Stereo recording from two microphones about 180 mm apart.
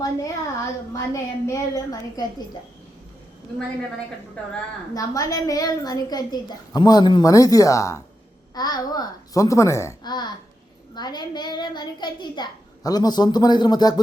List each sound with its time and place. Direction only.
0.0 s a woman's voice: 20° left (ahead or behind)
4.9 s a woman's voice: 20° left (ahead or behind)